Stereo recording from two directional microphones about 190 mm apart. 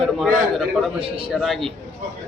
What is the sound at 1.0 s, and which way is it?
Speech, 30° right (ahead or behind).